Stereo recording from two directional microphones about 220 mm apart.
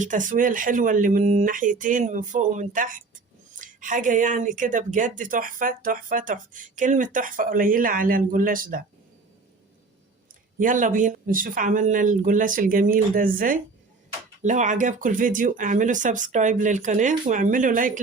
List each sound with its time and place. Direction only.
0.0 s speech: 35° right (ahead or behind)
10.6 s speech: 35° right (ahead or behind)